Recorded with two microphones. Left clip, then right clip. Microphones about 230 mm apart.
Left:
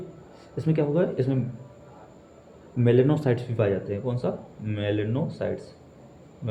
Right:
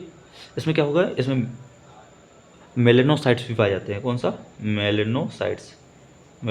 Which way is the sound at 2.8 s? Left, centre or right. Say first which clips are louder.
Right 4 dB; right.